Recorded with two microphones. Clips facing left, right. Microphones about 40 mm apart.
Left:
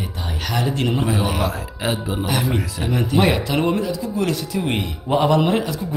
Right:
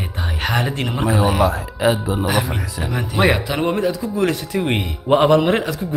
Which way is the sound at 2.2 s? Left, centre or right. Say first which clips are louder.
Left 2 dB; centre.